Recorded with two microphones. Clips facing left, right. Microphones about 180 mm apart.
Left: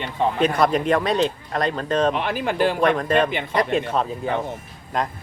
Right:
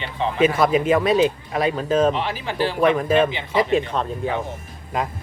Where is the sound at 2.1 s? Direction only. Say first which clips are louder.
Left 2 dB; 55° left (ahead or behind).